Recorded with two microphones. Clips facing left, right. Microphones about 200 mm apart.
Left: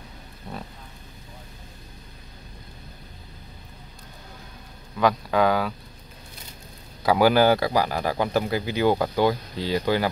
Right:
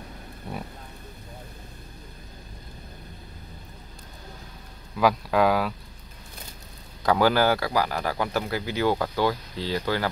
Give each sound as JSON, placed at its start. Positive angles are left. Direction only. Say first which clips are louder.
{"t": 4.9, "sound": "speech", "louder": "even", "side_deg": -5}
{"t": 7.0, "sound": "speech", "louder": "left 3 dB", "side_deg": 10}